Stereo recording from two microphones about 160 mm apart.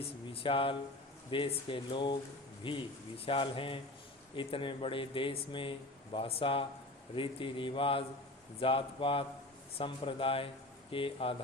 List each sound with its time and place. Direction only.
0.4 s speech: 35° left (ahead or behind)